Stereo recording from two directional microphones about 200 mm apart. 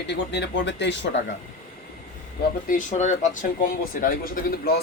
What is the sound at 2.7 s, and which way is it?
Speech, 40° left (ahead or behind).